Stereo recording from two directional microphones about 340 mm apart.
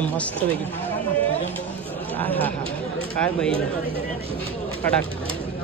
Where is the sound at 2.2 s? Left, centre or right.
Centre.